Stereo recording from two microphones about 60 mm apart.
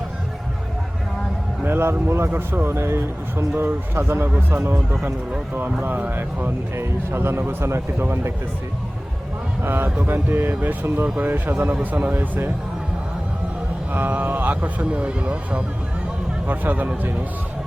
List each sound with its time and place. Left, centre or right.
1.6 s speech: right
5.8 s speech: right
9.6 s speech: right
13.9 s speech: right
16.5 s speech: right